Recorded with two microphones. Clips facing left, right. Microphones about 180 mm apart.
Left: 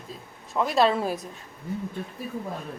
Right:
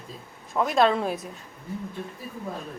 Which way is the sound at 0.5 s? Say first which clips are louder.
Right 1 dB; centre (ahead or behind).